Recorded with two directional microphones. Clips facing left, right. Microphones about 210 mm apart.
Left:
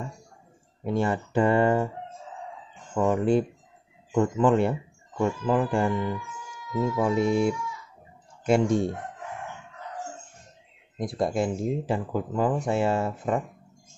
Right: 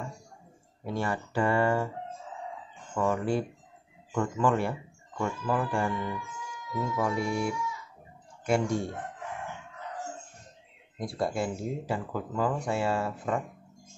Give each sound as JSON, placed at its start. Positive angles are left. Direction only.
{"t": 0.8, "sound": "speech", "side_deg": 20}
{"t": 3.0, "sound": "speech", "side_deg": 20}
{"t": 11.0, "sound": "speech", "side_deg": 20}